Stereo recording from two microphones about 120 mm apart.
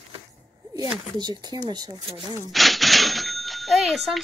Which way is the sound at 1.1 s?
35° right (ahead or behind).